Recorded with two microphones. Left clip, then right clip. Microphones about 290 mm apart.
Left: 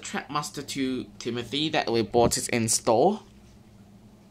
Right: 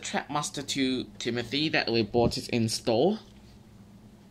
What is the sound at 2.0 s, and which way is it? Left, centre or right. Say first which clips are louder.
Speech: left 4 dB; left.